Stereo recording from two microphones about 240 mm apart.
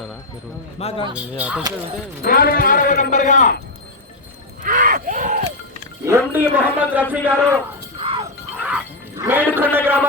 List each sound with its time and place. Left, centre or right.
0.8 s speech: left
1.1 s speech: centre
2.2 s speech: left
4.6 s crowd: right
6.1 s a man's voice: centre
7.9 s music: right
8.6 s dog: centre
9.7 s a man's voice: centre